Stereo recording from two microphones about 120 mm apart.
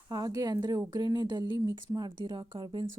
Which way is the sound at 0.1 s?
35° right (ahead or behind).